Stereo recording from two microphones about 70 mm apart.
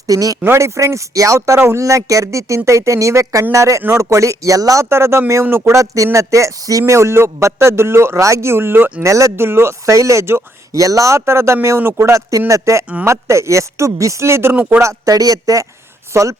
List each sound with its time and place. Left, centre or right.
0.1 s a man's voice: right
0.4 s speech: right
4.9 s speech: right
5.7 s speech: right
9.0 s speech: right
9.3 s speech: right
10.8 s speech: right
12.5 s speech: right
14.5 s a man's voice: right
14.8 s a man's voice: right
16.1 s speech: right